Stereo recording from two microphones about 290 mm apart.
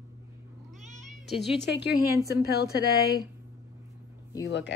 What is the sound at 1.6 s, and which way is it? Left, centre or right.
Speech, left.